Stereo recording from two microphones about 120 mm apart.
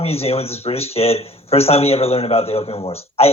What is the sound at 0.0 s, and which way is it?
Speech, 55° left (ahead or behind).